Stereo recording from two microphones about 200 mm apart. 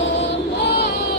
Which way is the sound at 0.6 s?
55° left (ahead or behind).